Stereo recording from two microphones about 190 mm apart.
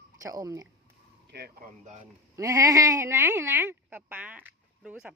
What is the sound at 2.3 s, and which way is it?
Speech, 15° right (ahead or behind).